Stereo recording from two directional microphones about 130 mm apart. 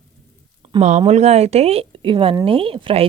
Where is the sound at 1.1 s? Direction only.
55° right (ahead or behind).